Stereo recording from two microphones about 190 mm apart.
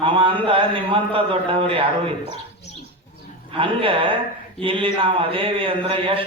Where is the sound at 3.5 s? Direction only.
30° right (ahead or behind).